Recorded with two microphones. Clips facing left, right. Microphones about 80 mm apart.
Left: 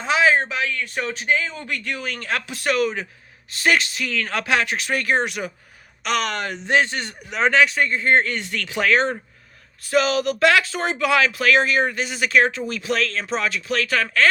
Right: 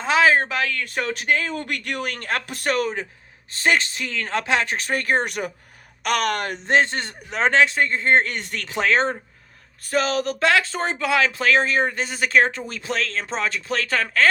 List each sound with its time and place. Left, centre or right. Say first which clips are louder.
0.0 s a sound: right 1 dB; right
0.7 s speech: right 1 dB; right
6.7 s speech: right 1 dB; right